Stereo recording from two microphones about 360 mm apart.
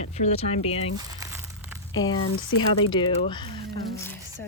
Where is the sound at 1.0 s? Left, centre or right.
Centre.